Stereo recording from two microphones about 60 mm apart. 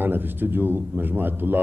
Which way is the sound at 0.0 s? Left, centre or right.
Right.